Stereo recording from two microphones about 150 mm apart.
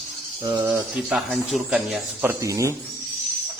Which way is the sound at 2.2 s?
20° right (ahead or behind).